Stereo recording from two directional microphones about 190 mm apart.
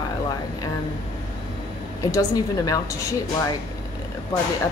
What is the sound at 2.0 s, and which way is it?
Speech, 15° left (ahead or behind).